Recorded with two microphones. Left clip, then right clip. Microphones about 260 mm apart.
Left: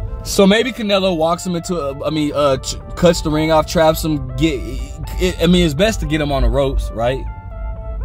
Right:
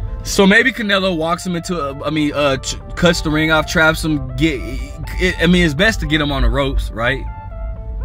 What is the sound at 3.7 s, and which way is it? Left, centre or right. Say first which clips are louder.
Speech: right 1 dB; right.